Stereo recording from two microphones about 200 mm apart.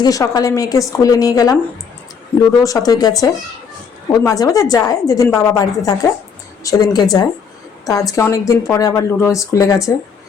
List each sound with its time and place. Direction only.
0.0 s a woman's voice: 15° left (ahead or behind)
2.6 s a woman's voice: 20° left (ahead or behind)